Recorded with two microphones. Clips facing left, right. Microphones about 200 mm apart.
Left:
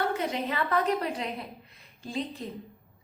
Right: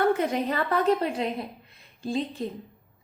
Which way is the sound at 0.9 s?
30° right (ahead or behind).